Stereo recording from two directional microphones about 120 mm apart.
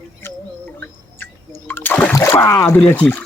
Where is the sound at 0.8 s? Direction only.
15° left (ahead or behind).